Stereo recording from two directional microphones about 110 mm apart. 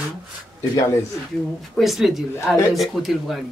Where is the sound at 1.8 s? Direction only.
Centre (ahead or behind).